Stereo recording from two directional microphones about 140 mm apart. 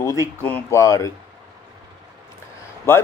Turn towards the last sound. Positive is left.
turn(degrees=20)  # may be behind; listen again after turning